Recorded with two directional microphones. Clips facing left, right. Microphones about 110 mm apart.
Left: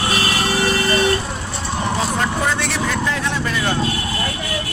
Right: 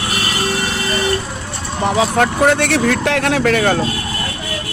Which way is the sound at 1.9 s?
70° right (ahead or behind).